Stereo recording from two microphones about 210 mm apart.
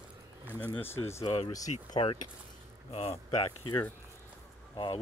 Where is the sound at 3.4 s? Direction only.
20° left (ahead or behind).